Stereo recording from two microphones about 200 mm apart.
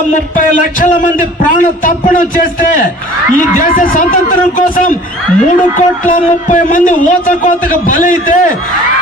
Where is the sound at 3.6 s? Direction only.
45° left (ahead or behind).